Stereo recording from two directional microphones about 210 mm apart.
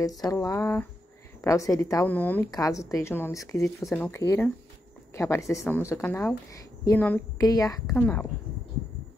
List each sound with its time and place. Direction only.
0.0 s a woman's voice: 15° left (ahead or behind)